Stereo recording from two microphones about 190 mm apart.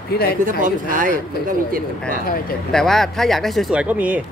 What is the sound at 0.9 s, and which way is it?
Speech, 45° right (ahead or behind).